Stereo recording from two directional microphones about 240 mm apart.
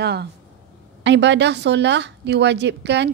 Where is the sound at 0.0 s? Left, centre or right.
Right.